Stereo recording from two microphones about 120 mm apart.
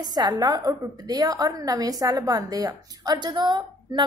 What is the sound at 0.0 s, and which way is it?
A woman's voice, 35° right (ahead or behind).